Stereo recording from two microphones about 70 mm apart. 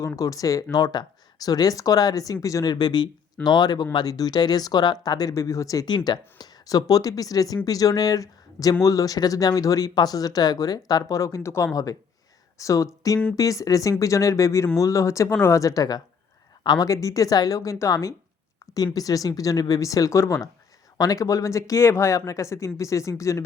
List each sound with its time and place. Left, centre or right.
0.0 s speech: left
2.6 s speech: left
3.9 s speech: left
5.3 s speech: left
6.1 s speech: left
11.7 s speech: left